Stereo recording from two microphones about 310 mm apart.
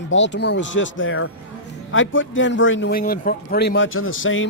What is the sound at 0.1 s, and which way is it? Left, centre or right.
A man's voice, left.